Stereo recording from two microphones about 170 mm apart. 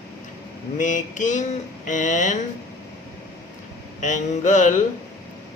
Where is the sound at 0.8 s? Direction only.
50° left (ahead or behind).